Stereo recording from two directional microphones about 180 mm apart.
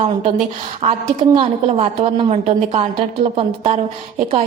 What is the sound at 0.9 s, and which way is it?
A woman's voice, 30° right (ahead or behind).